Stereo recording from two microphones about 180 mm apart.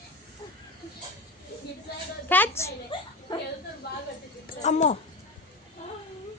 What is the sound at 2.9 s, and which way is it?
Speech, 30° left (ahead or behind).